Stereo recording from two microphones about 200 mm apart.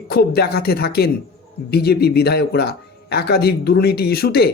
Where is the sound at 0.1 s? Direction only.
55° left (ahead or behind).